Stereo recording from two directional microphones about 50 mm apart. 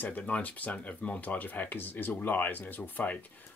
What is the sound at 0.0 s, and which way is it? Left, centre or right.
Speech, left.